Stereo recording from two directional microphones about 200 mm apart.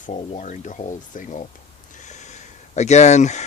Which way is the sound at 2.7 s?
35° left (ahead or behind).